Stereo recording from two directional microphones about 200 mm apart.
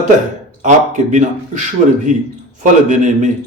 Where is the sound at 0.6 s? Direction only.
40° right (ahead or behind).